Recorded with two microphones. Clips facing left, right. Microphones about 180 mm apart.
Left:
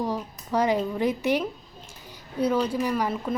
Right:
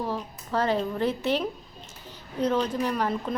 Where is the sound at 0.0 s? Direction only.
15° left (ahead or behind).